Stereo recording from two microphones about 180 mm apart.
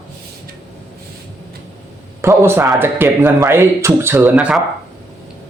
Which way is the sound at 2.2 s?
15° right (ahead or behind).